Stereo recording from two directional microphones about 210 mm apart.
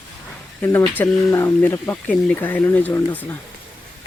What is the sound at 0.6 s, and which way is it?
Speech, 10° left (ahead or behind).